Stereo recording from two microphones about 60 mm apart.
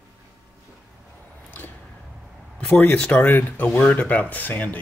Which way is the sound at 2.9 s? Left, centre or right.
Left.